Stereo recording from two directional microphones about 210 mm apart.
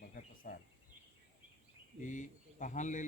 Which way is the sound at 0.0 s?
40° left (ahead or behind).